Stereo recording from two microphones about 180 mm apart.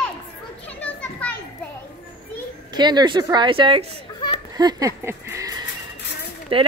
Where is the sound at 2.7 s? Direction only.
25° right (ahead or behind).